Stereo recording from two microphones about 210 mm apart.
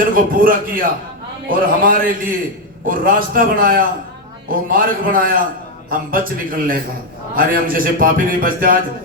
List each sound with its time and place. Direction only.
0.1 s a man's voice: 40° right (ahead or behind)